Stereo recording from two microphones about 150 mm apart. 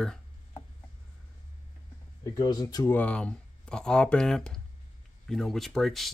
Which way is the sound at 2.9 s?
10° left (ahead or behind).